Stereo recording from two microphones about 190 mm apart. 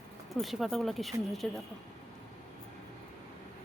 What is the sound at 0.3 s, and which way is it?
Speech, centre (ahead or behind).